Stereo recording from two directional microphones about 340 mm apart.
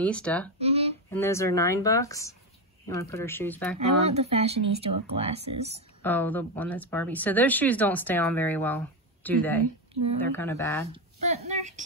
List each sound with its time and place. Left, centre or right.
0.0 s speech: centre
0.6 s guitar: centre
1.1 s speech: centre
3.7 s speech: centre
6.0 s speech: centre
10.9 s a sound: centre